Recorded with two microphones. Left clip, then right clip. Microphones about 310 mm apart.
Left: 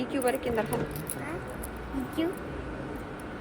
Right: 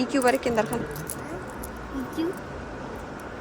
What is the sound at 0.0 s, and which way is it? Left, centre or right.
Speech, centre.